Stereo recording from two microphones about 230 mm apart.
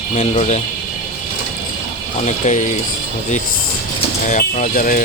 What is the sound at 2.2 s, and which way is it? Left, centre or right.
Speech, left.